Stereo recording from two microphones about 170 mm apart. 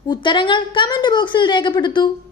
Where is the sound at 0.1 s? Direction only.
30° left (ahead or behind).